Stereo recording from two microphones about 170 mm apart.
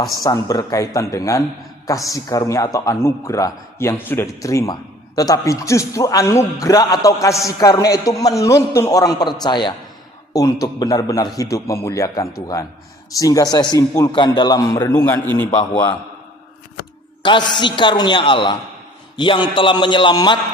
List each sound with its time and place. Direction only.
0.2 s a man's voice: 20° left (ahead or behind)
17.2 s a man's voice: 30° left (ahead or behind)